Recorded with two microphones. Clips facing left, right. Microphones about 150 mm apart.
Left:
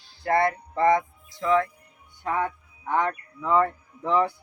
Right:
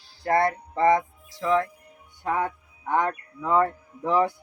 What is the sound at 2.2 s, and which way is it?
Music, 10° right (ahead or behind).